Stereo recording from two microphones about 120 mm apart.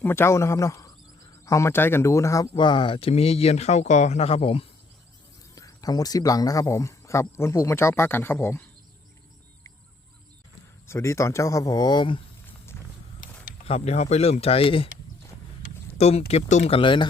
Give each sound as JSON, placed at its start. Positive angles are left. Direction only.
{"t": 0.0, "sound": "a man's voice", "side_deg": 20}
{"t": 2.6, "sound": "speech", "side_deg": 40}
{"t": 5.5, "sound": "speech", "side_deg": 30}
{"t": 10.8, "sound": "speech", "side_deg": 25}
{"t": 13.7, "sound": "speech", "side_deg": 60}
{"t": 16.0, "sound": "speech", "side_deg": 60}
{"t": 16.7, "sound": "speech", "side_deg": 45}